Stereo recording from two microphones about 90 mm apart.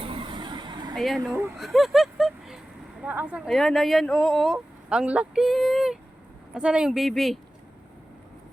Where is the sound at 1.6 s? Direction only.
Centre (ahead or behind).